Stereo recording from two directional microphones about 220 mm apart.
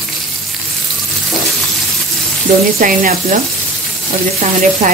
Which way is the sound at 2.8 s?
35° right (ahead or behind).